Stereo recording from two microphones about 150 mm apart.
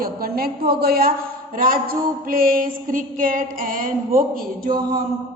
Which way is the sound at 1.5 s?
75° right (ahead or behind).